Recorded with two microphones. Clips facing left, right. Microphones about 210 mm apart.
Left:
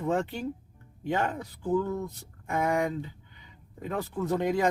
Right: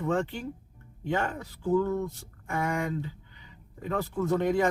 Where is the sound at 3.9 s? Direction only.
15° left (ahead or behind).